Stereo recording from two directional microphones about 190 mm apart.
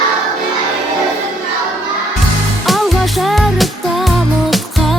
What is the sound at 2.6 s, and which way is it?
Music, centre (ahead or behind).